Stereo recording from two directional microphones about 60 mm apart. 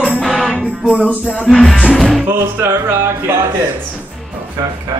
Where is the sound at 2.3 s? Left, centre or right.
Right.